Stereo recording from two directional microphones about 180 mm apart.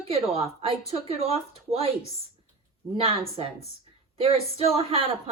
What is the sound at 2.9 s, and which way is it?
Speech, 30° right (ahead or behind).